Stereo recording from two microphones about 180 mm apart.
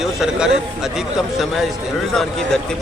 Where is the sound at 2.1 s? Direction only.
Centre (ahead or behind).